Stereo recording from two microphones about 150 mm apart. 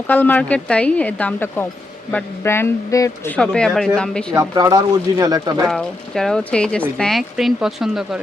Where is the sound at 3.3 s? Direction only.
5° left (ahead or behind).